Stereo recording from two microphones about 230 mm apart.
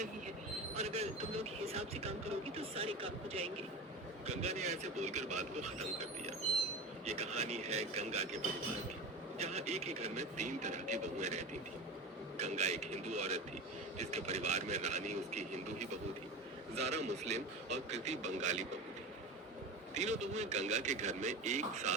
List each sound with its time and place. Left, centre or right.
0.8 s speech: right
9.4 s speech: right
19.9 s speech: right